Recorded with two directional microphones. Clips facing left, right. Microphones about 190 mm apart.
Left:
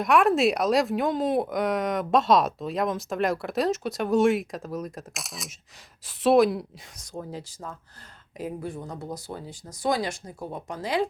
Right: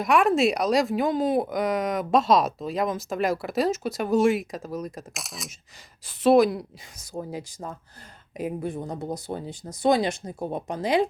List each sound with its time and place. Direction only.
0.0 s speech: centre (ahead or behind); by 11.0 s 20° right (ahead or behind)